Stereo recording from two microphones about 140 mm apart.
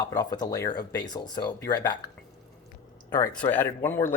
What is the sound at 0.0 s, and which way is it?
Speech, 25° left (ahead or behind).